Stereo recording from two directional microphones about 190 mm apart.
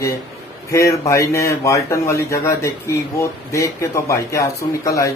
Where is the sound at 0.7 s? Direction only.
15° left (ahead or behind).